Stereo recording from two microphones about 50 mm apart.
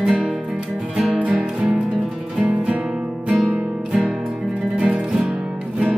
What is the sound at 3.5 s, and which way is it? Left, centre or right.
Music, centre.